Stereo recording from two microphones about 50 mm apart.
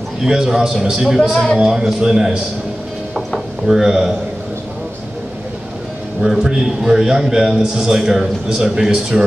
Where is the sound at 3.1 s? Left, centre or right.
Centre.